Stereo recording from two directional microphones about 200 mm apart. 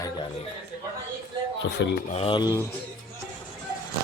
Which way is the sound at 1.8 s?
60° left (ahead or behind).